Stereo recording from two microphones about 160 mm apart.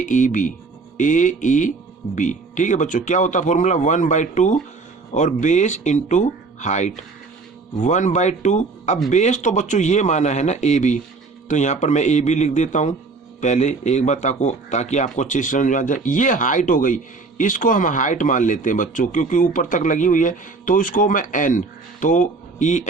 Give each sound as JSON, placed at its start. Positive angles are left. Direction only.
{"t": 0.0, "sound": "a man's voice", "side_deg": 55}